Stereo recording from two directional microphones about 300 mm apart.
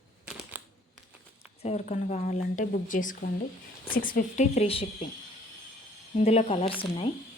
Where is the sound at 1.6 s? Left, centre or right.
Left.